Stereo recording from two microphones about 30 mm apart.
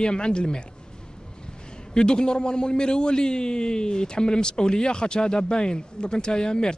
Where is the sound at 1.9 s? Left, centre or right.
Left.